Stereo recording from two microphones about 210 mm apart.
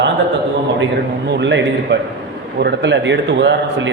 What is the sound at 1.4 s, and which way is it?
A man's voice, 55° right (ahead or behind).